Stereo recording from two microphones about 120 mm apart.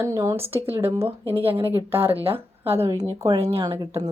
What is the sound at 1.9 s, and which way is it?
Speech, 15° right (ahead or behind).